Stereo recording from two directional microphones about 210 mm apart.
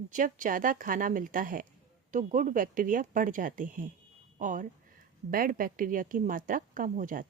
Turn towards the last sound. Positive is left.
turn(degrees=-40)  # may be behind; listen again after turning